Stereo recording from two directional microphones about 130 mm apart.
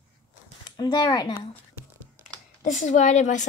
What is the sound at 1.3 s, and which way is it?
Speech, 45° left (ahead or behind).